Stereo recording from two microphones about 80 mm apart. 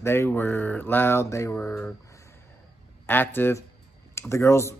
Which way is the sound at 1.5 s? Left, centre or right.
Centre.